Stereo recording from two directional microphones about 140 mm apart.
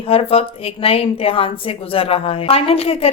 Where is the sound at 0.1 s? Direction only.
45° left (ahead or behind).